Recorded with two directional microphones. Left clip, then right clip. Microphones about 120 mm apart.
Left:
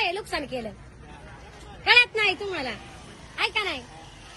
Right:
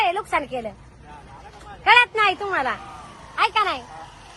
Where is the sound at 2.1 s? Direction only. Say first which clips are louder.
Right 5 dB; 40° right (ahead or behind).